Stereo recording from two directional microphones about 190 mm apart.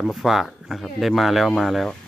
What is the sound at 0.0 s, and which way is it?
Speech, centre (ahead or behind).